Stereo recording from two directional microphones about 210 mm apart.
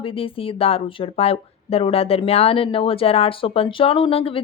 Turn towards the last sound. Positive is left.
turn(degrees=25)  # may be behind; listen again after turning